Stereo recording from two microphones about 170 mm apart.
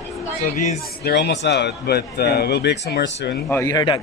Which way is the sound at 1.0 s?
85° left.